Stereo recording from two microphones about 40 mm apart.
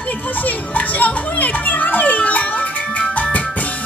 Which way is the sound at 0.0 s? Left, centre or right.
Left.